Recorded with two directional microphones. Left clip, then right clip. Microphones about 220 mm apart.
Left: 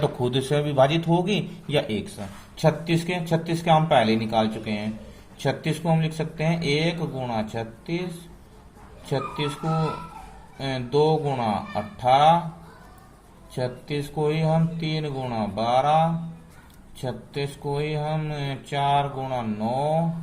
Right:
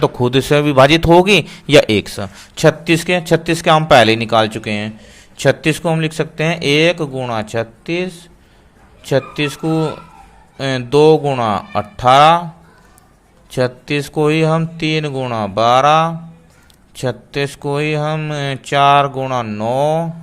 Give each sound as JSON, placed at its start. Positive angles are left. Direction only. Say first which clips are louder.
{"t": 0.0, "sound": "a man's voice", "louder": "right 10 dB", "side_deg": -35}
{"t": 13.5, "sound": "a man's voice", "louder": "right 12 dB", "side_deg": -50}